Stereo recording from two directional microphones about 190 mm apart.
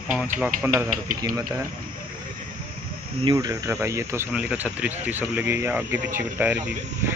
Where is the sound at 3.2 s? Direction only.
20° right (ahead or behind).